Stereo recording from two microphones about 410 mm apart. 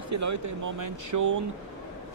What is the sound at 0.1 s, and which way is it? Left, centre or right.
Speech, right.